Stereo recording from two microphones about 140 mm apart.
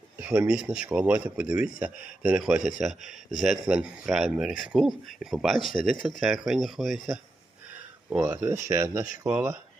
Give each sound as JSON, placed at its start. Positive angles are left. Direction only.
{"t": 0.2, "sound": "speech", "side_deg": -10}
{"t": 8.1, "sound": "speech", "side_deg": -15}